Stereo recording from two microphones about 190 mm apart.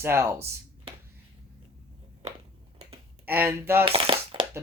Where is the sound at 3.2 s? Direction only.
10° right (ahead or behind).